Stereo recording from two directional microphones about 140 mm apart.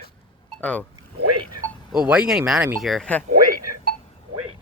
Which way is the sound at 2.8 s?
Centre (ahead or behind).